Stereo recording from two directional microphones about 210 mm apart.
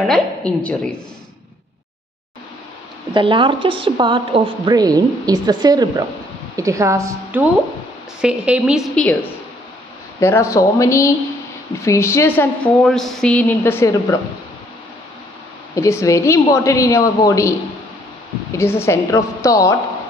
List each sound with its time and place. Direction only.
0.0 s a woman's voice: 5° left (ahead or behind)
3.1 s a woman's voice: 25° right (ahead or behind); by 9.1 s centre (ahead or behind)
10.2 s a woman's voice: 15° left (ahead or behind)
15.7 s a woman's voice: 15° left (ahead or behind)